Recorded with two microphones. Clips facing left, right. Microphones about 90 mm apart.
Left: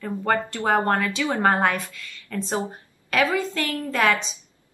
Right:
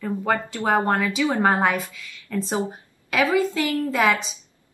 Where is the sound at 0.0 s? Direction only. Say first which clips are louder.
Even; 5° right (ahead or behind).